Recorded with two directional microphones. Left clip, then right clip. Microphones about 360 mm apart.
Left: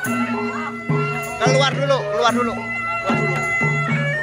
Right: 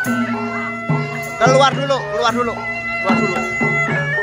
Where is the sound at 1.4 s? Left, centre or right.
Centre.